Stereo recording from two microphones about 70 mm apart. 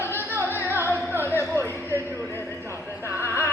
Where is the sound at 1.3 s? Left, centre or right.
Right.